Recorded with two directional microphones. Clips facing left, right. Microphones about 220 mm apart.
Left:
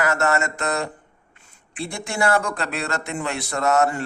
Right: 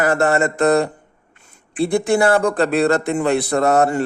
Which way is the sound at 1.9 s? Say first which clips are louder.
Right 7 dB; 35° right (ahead or behind).